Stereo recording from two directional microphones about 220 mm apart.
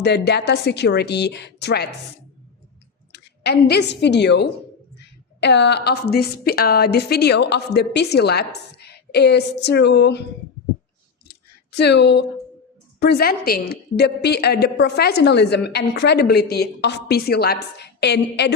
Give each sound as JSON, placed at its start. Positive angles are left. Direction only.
{"t": 0.0, "sound": "a woman's voice", "side_deg": 50}
{"t": 3.1, "sound": "a woman's voice", "side_deg": 50}
{"t": 11.8, "sound": "a woman's voice", "side_deg": 50}